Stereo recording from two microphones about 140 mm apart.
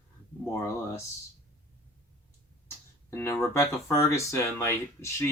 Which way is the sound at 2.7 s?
20° left (ahead or behind).